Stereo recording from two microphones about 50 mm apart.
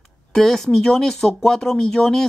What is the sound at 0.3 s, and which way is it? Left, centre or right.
Speech, centre.